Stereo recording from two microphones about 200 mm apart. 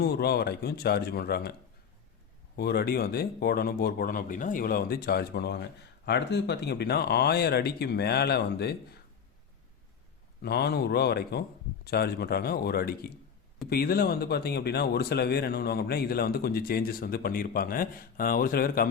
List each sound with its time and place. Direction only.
0.0 s speech: 50° left (ahead or behind)
2.6 s speech: 50° left (ahead or behind)
10.4 s speech: 55° left (ahead or behind)